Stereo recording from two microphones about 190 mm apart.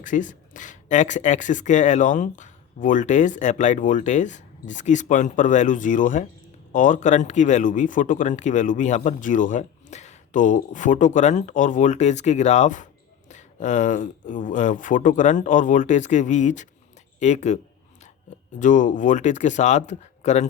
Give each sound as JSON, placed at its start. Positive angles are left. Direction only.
{"t": 0.0, "sound": "speech", "side_deg": 45}
{"t": 18.6, "sound": "speech", "side_deg": 40}